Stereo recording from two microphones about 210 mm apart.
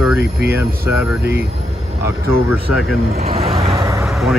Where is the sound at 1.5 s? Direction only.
30° right (ahead or behind).